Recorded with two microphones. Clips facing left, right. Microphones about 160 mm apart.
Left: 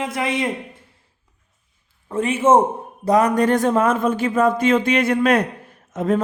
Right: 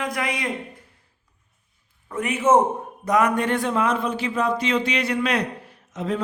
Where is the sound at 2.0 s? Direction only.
30° left (ahead or behind).